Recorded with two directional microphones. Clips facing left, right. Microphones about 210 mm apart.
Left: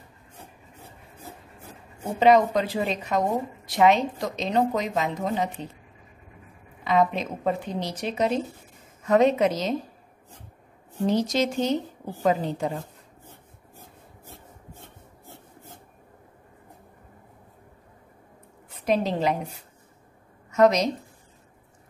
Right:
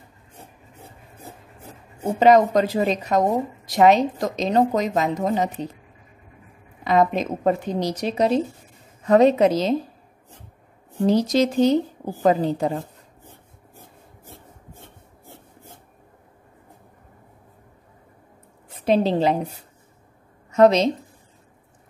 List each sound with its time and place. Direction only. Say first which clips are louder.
2.1 s speech: right 3 dB; 40° right (ahead or behind)
6.8 s speech: right 3 dB; 45° right (ahead or behind)
11.1 s speech: right 5 dB; 35° right (ahead or behind)
14.7 s filing: right 1 dB; 10° right (ahead or behind)
18.7 s a woman's voice: right 5 dB; 30° right (ahead or behind)
20.5 s a woman's voice: right 4 dB; 30° right (ahead or behind)